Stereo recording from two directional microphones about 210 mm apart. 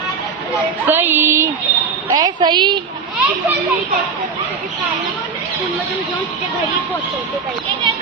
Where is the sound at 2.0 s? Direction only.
20° right (ahead or behind).